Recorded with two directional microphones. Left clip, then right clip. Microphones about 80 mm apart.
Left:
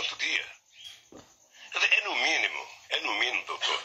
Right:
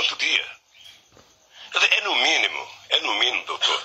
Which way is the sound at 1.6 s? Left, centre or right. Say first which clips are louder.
Right 5 dB; right.